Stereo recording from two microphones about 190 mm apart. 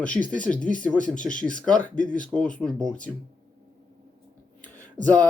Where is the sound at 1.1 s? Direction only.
40° left (ahead or behind).